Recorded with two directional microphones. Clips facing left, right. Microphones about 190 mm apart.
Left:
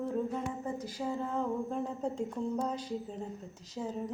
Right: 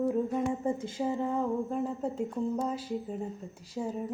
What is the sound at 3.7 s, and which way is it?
Speech, 10° right (ahead or behind).